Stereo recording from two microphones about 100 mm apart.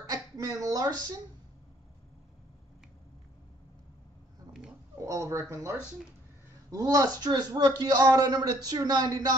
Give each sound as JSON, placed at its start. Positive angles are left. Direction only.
{"t": 0.1, "sound": "a woman's voice", "side_deg": -35}
{"t": 5.0, "sound": "a man's voice", "side_deg": -30}